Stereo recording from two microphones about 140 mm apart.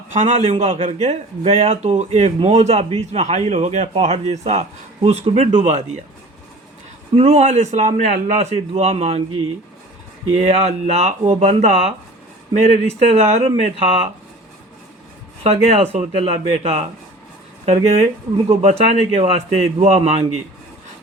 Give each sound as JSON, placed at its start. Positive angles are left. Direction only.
{"t": 0.1, "sound": "a man's voice", "side_deg": -50}
{"t": 7.2, "sound": "a man's voice", "side_deg": -50}
{"t": 10.6, "sound": "a man's voice", "side_deg": -45}
{"t": 15.4, "sound": "a man's voice", "side_deg": -45}